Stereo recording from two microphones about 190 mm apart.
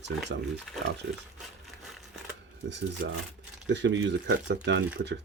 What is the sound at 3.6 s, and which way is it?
Speech, 70° right (ahead or behind).